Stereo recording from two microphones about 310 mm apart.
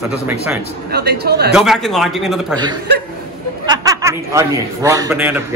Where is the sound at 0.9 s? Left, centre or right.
Right.